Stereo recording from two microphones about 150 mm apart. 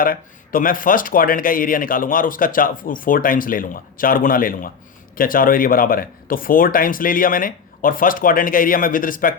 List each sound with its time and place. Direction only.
0.0 s speech: 70° left (ahead or behind)